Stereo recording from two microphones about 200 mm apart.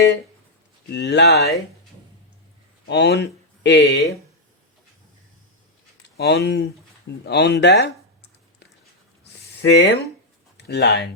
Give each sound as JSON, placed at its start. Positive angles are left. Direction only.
{"t": 0.9, "sound": "speech", "side_deg": 60}
{"t": 2.8, "sound": "speech", "side_deg": 55}
{"t": 6.1, "sound": "speech", "side_deg": 55}
{"t": 7.3, "sound": "a sound", "side_deg": 55}
{"t": 10.7, "sound": "speech", "side_deg": 55}